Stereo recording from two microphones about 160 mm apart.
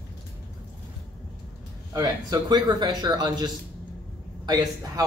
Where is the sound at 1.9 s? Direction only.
20° right (ahead or behind).